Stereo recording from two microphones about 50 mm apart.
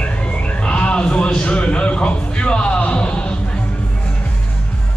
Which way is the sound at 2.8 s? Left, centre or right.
Left.